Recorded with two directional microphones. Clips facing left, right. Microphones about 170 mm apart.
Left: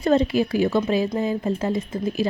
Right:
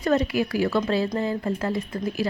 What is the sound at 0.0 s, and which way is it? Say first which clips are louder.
A woman's voice: left 3 dB; 25° left (ahead or behind).